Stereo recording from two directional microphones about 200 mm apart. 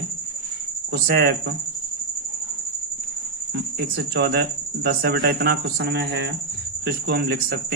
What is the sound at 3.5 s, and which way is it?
Speech, 55° right (ahead or behind).